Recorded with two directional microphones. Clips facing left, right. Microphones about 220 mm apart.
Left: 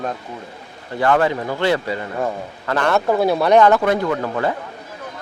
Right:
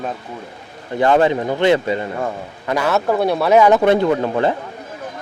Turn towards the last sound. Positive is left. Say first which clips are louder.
# right 4 dB
turn(degrees=-25)  # may be behind; listen again after turning